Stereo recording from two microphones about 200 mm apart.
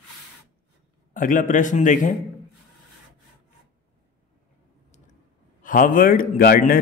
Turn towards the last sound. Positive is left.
turn(degrees=45)  # may be behind; listen again after turning